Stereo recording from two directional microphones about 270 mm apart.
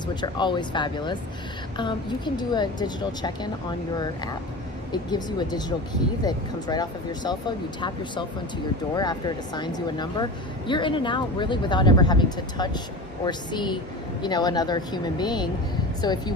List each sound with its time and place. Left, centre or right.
0.1 s speech: centre
4.9 s speech: centre